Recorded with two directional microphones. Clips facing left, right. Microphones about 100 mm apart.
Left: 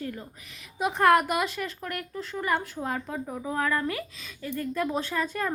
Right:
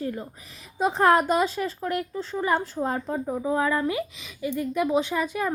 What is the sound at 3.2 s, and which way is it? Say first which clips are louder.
A woman's voice: right 5 dB; 20° right (ahead or behind).